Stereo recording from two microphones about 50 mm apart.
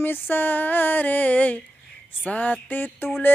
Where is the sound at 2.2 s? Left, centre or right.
Left.